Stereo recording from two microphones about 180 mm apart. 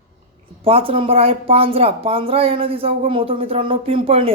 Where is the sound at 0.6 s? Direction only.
30° right (ahead or behind).